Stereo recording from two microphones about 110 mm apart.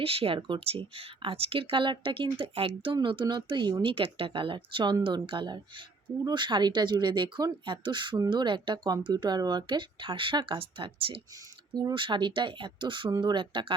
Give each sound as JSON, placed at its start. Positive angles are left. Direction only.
{"t": 0.0, "sound": "speech", "side_deg": -60}
{"t": 11.7, "sound": "speech", "side_deg": -40}